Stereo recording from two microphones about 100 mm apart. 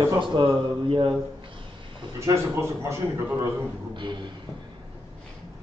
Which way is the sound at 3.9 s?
55° right (ahead or behind).